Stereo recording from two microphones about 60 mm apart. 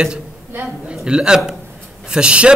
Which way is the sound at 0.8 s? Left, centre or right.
Centre.